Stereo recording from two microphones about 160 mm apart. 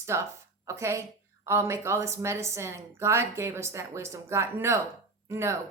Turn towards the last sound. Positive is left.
turn(degrees=-15)  # may be behind; listen again after turning